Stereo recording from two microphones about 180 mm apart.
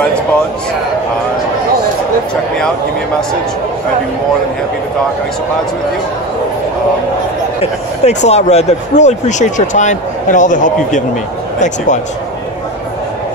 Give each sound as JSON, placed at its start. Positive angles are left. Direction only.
{"t": 7.6, "sound": "speech", "side_deg": 40}